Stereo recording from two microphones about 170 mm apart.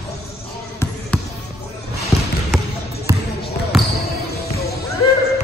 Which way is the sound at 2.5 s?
Centre (ahead or behind).